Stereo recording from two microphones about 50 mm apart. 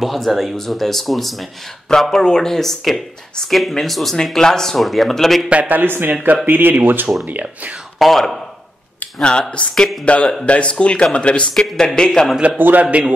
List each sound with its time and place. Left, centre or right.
0.0 s speech: centre
5.5 s a man's voice: right
8.0 s speech: centre
9.2 s speech: centre
11.5 s speech: centre
12.5 s a man's voice: right